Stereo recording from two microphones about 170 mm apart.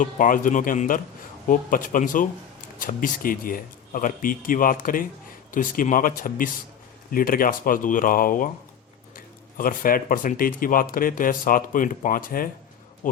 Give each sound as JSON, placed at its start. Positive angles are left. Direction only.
{"t": 0.0, "sound": "speech", "side_deg": 50}